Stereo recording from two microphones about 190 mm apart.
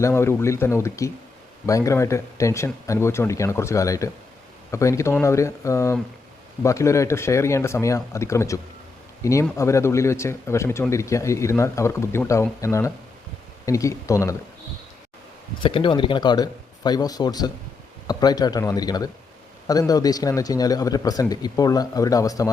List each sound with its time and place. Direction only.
0.0 s speech: 15° left (ahead or behind)
15.6 s speech: 25° left (ahead or behind)